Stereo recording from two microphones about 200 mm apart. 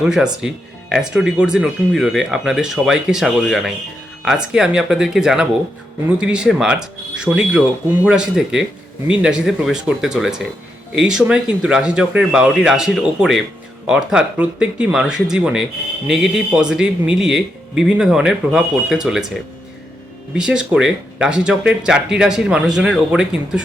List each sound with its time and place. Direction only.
0.0 s speech: 5° right (ahead or behind)
20.3 s speech: 5° right (ahead or behind)